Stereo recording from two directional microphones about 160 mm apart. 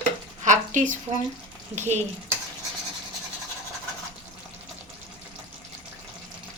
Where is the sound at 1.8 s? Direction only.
45° right (ahead or behind).